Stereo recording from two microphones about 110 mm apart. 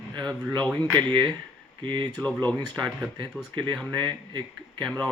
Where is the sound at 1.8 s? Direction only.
45° right (ahead or behind).